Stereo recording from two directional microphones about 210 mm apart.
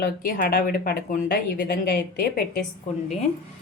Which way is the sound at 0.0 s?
45° left (ahead or behind).